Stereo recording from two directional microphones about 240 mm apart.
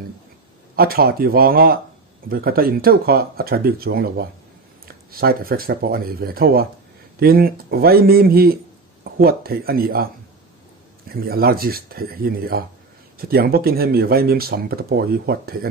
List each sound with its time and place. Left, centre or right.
0.7 s speech: right
11.1 s speech: right